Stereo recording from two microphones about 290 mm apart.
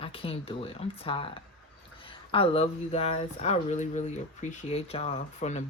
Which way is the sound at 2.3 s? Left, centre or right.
Centre.